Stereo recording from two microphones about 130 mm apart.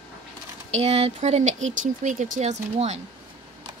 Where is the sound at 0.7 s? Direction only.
55° right (ahead or behind).